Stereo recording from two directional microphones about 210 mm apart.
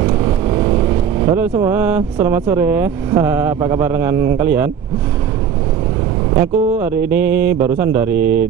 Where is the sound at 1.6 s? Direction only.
10° right (ahead or behind).